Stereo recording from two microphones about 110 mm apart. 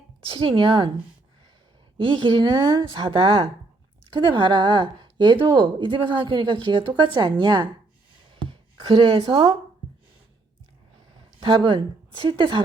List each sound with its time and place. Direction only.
0.3 s a woman's voice: 50° right (ahead or behind)
2.0 s a woman's voice: 45° right (ahead or behind)
11.3 s a woman's voice: 50° right (ahead or behind)